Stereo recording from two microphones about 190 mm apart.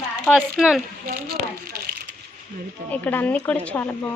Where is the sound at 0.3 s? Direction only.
Centre (ahead or behind).